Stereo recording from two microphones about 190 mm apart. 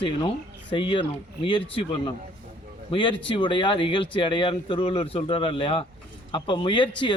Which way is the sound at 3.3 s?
25° left (ahead or behind).